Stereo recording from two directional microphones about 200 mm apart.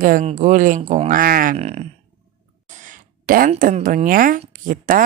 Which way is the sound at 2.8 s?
45° right (ahead or behind).